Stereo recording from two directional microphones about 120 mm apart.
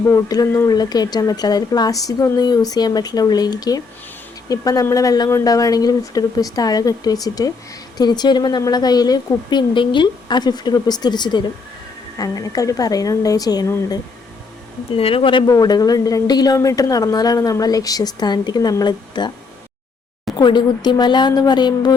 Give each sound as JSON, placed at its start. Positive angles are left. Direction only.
{"t": 0.0, "sound": "a woman's voice", "side_deg": 25}
{"t": 14.9, "sound": "speech", "side_deg": 50}
{"t": 15.4, "sound": "a woman's voice", "side_deg": 30}
{"t": 20.4, "sound": "a woman's voice", "side_deg": 40}